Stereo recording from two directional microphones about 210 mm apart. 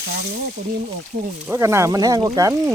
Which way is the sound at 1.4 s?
10° right (ahead or behind).